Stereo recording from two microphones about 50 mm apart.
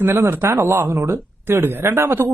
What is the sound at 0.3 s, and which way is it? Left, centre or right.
Speech, right.